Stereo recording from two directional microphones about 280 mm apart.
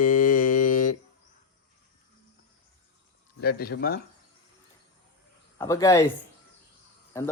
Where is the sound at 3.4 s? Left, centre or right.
Left.